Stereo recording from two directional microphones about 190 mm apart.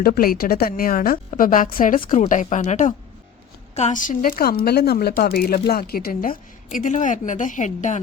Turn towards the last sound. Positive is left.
turn(degrees=40)  # may be behind; listen again after turning